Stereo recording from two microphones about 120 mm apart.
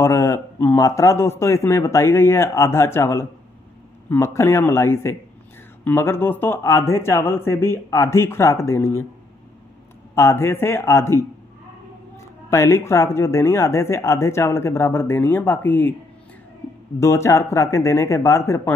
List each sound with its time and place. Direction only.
0.0 s speech: 25° left (ahead or behind)
10.1 s speech: 20° left (ahead or behind)
12.4 s speech: 25° left (ahead or behind)
17.0 s speech: 25° left (ahead or behind)